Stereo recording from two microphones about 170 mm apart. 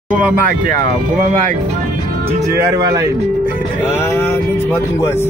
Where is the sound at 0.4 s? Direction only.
50° right (ahead or behind).